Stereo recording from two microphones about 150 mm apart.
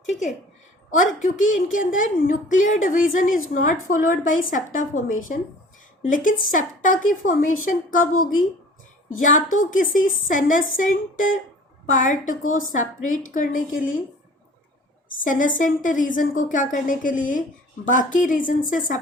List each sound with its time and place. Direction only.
0.9 s a woman's voice: 60° left (ahead or behind)
15.2 s a woman's voice: 60° left (ahead or behind)